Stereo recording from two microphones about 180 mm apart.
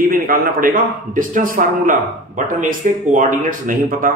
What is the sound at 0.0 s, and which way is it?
A man's voice, 55° right (ahead or behind).